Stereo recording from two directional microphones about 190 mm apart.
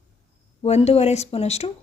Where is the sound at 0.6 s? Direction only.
35° left (ahead or behind).